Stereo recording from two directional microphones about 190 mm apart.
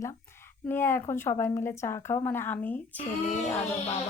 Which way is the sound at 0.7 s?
10° left (ahead or behind).